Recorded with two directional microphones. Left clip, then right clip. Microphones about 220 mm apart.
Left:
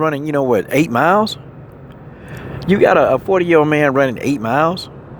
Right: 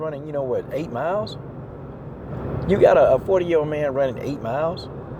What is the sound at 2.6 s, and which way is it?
Speech, 35° left (ahead or behind).